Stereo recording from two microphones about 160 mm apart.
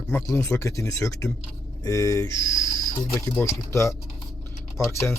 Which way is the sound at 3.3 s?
15° left (ahead or behind).